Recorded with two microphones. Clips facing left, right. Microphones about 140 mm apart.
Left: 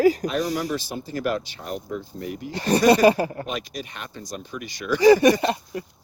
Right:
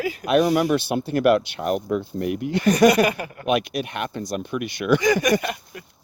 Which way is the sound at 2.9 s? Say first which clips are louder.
Left 4 dB; 30° left (ahead or behind).